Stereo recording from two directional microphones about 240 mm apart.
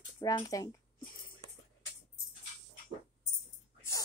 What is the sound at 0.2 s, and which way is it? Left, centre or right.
Speech, centre.